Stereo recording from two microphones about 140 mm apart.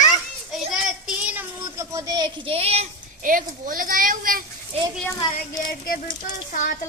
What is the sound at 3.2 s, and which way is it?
Speech, 75° right (ahead or behind).